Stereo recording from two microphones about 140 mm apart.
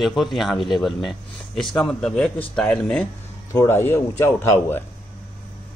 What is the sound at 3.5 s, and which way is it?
A man's voice, 20° left (ahead or behind).